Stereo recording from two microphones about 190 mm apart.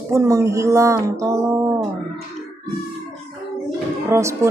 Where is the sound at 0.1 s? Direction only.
15° right (ahead or behind).